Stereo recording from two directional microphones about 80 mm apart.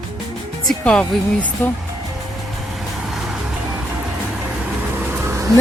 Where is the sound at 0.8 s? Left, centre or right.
Centre.